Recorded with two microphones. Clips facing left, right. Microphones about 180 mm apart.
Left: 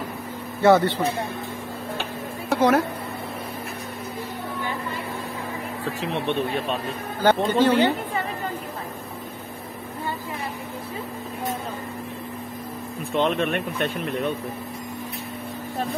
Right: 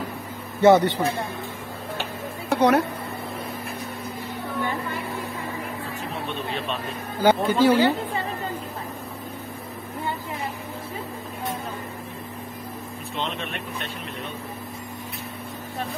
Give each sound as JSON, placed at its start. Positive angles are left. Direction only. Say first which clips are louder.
{"t": 0.6, "sound": "speech", "louder": "right 1 dB", "side_deg": -20}
{"t": 2.5, "sound": "speech", "louder": "even", "side_deg": 0}
{"t": 7.2, "sound": "speech", "louder": "even", "side_deg": -10}
{"t": 13.2, "sound": "speech", "louder": "left 9 dB", "side_deg": 50}